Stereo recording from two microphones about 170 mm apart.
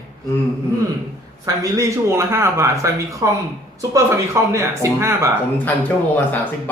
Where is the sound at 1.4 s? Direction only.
15° right (ahead or behind).